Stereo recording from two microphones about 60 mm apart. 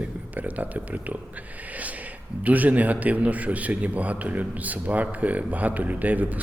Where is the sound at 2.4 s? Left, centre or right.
Right.